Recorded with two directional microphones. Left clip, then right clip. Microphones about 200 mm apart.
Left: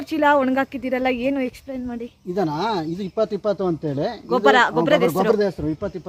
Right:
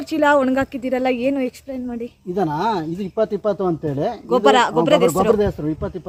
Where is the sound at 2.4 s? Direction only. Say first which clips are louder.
Right 2 dB; 20° left (ahead or behind).